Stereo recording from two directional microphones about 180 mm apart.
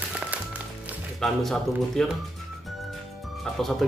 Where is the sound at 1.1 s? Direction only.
Centre (ahead or behind).